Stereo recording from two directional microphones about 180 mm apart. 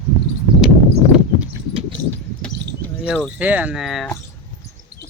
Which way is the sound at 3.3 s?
10° right (ahead or behind).